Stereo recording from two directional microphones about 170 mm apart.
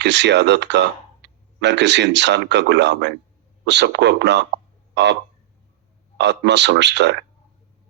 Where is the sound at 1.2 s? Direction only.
90° right.